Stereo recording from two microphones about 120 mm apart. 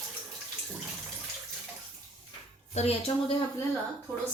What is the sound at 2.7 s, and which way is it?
Speech, 60° left (ahead or behind).